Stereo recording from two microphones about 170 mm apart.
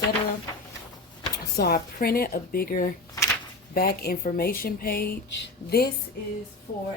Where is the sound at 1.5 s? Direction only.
65° left (ahead or behind).